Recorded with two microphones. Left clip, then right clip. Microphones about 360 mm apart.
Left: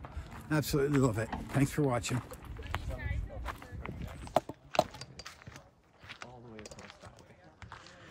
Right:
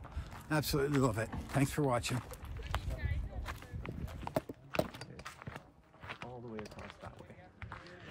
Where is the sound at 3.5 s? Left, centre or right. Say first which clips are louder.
Left 3 dB; centre.